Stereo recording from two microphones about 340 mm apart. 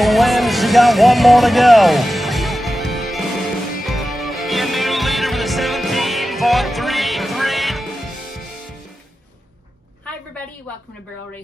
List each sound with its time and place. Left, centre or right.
0.0 s music: centre